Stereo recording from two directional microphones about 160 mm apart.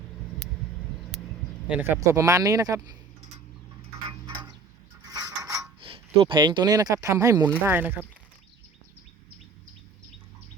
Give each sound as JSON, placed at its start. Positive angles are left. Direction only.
{"t": 1.6, "sound": "speech", "side_deg": -10}
{"t": 2.0, "sound": "speech", "side_deg": -20}
{"t": 5.0, "sound": "a sound", "side_deg": -25}
{"t": 5.8, "sound": "speech", "side_deg": -35}
{"t": 7.6, "sound": "speech", "side_deg": -10}